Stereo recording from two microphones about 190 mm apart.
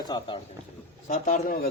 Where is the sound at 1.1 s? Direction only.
45° left (ahead or behind).